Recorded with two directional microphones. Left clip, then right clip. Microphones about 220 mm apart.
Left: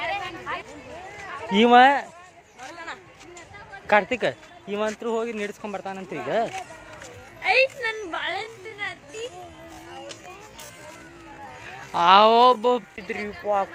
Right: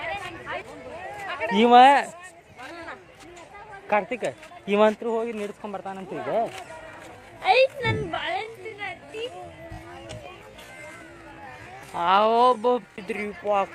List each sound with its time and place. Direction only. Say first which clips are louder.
0.0 s chatter: left 3 dB; 45° left (ahead or behind)
1.5 s speech: right 1 dB; 5° left (ahead or behind)
3.8 s speech: left 4 dB; 15° left (ahead or behind)
4.6 s speech: right 7 dB; 20° right (ahead or behind)
5.0 s speech: even; 5° left (ahead or behind)
7.4 s a child's voice: right 1 dB; 15° right (ahead or behind)
8.1 s a sound: even; centre (ahead or behind)
11.9 s speech: left 4 dB; 15° left (ahead or behind)
13.2 s a child's voice: even; 10° right (ahead or behind)